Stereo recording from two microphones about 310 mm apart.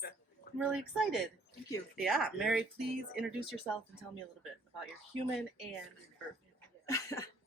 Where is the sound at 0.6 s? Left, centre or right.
Centre.